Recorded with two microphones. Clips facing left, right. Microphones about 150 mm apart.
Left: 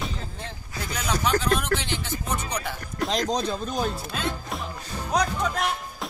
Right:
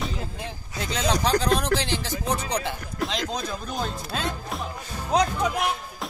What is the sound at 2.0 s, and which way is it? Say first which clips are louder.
Music: right 3 dB; 35° right (ahead or behind).